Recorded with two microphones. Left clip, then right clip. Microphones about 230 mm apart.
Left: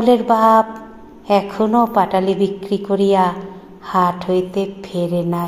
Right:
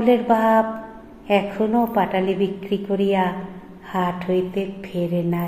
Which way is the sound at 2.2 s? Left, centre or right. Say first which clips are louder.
Left 4 dB; left.